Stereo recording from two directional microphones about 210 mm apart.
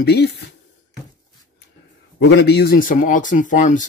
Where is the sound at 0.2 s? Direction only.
55° left (ahead or behind).